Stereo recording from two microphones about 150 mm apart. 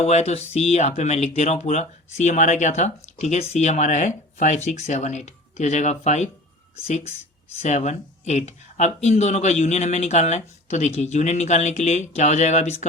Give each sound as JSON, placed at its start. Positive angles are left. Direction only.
{"t": 0.0, "sound": "speech", "side_deg": 45}